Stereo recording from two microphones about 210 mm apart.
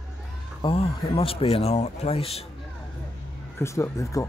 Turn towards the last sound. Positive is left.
turn(degrees=15)  # may be behind; listen again after turning